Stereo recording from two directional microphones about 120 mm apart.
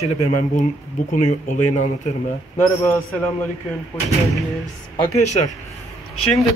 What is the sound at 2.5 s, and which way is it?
Speech, 15° left (ahead or behind).